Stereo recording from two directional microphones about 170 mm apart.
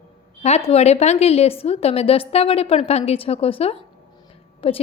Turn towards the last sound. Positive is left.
turn(degrees=35)  # may be behind; listen again after turning